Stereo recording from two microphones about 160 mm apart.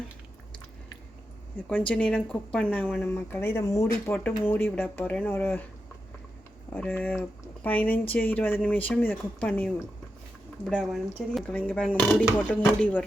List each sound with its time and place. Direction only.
1.9 s speech: 5° left (ahead or behind)
4.0 s speech: 10° left (ahead or behind)
6.7 s speech: 10° left (ahead or behind)